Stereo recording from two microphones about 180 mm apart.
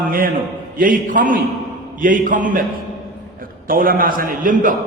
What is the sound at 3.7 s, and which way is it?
A man's voice, 50° right (ahead or behind).